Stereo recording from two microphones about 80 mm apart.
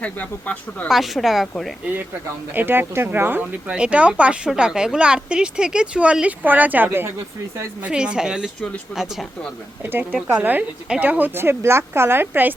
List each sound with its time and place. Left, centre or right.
0.0 s speech: centre
0.9 s speech: centre
2.5 s speech: right
3.7 s speech: centre
7.8 s speech: centre
8.9 s speech: left
10.3 s speech: right